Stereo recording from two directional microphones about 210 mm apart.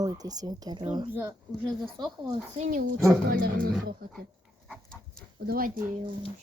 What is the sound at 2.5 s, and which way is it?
Speech, 40° right (ahead or behind).